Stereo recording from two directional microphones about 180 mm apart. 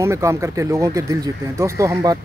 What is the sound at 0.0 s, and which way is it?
Speech, 15° right (ahead or behind).